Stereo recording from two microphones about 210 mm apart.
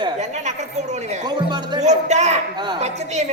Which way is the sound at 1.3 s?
20° right (ahead or behind).